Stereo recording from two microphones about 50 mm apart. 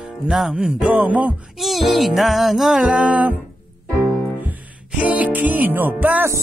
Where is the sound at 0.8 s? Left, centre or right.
Right.